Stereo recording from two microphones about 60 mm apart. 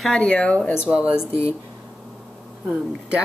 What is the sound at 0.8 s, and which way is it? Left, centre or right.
Speech, centre.